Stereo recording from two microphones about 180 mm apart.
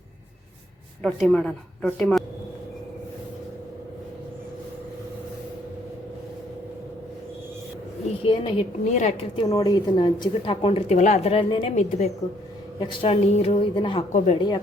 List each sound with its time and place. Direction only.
1.0 s a woman's voice: centre (ahead or behind)
8.2 s a woman's voice: 30° left (ahead or behind)
9.4 s a woman's voice: 20° left (ahead or behind)